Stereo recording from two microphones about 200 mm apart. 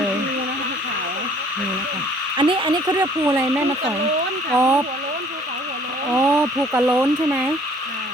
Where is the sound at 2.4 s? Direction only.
25° right (ahead or behind).